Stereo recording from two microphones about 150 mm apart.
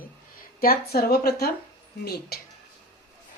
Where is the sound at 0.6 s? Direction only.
85° left.